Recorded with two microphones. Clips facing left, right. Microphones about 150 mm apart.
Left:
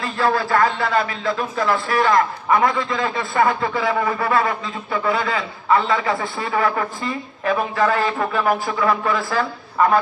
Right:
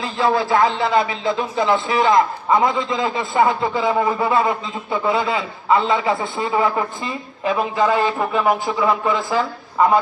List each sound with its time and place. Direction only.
0.2 s speech: 15° right (ahead or behind)